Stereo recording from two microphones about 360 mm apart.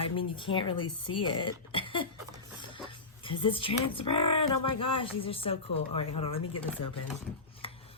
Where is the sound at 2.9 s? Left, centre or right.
Centre.